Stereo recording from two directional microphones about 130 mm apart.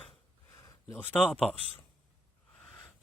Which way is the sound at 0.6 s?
20° left (ahead or behind).